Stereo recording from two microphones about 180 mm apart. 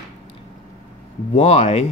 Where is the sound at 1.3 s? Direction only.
40° left (ahead or behind).